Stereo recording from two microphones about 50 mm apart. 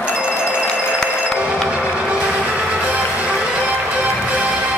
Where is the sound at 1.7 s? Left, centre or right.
Right.